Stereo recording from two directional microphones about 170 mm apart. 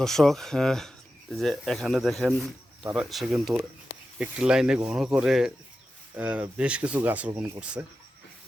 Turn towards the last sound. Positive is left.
turn(degrees=-5)  # may be behind; listen again after turning